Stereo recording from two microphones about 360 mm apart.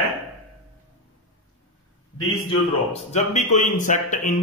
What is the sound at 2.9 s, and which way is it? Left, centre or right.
Speech, centre.